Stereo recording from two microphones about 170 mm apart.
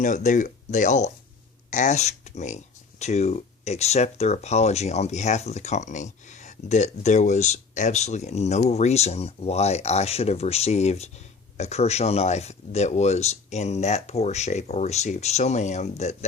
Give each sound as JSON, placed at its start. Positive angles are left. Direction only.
{"t": 0.0, "sound": "speech", "side_deg": 45}